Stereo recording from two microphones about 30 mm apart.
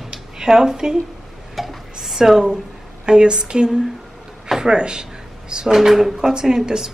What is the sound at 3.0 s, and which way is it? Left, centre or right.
Speech, right.